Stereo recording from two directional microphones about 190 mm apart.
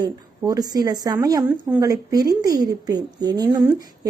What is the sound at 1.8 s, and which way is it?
A woman's voice, 20° right (ahead or behind).